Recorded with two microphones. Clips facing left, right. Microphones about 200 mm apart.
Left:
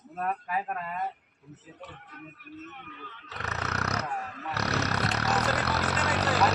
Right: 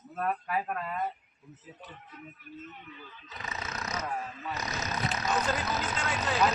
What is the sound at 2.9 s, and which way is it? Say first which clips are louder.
Roaring cats: left 2 dB; 70° left (ahead or behind).